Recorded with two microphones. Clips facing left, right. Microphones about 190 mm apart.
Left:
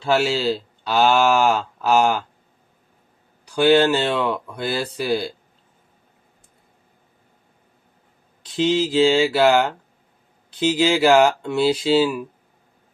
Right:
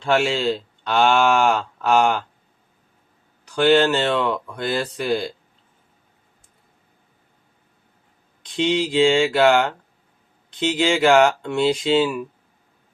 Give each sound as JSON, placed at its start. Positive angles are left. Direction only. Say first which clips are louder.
{"t": 0.0, "sound": "speech", "louder": "even", "side_deg": 5}
{"t": 3.4, "sound": "speech", "louder": "left 1 dB", "side_deg": 10}
{"t": 8.4, "sound": "speech", "louder": "left 1 dB", "side_deg": 5}